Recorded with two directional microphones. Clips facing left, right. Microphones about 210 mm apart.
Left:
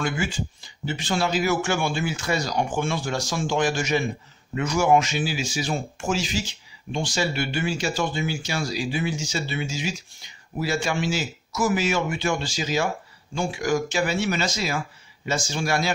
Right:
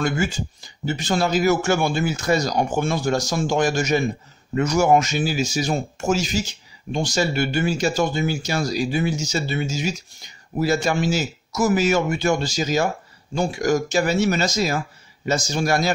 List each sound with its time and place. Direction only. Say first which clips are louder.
0.0 s speech: right 4 dB; 40° right (ahead or behind)